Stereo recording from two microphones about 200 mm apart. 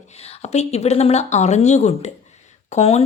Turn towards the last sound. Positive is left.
turn(degrees=30)  # may be behind; listen again after turning